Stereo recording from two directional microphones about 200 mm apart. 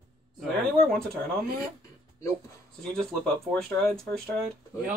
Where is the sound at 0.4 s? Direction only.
5° left (ahead or behind).